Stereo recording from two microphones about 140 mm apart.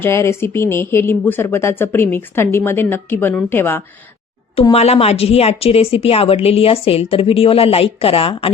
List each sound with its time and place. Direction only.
0.0 s speech: 20° left (ahead or behind)
4.7 s speech: 45° left (ahead or behind)